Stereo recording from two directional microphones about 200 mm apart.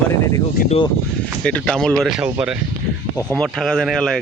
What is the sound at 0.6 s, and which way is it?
Speech, 45° left (ahead or behind).